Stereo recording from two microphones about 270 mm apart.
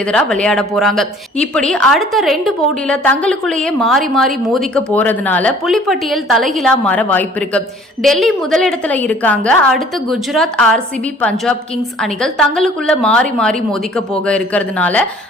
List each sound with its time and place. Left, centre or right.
0.0 s speech: centre